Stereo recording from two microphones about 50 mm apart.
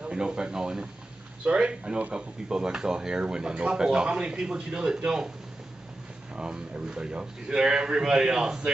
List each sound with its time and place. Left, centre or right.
0.0 s speech: centre
6.3 s speech: centre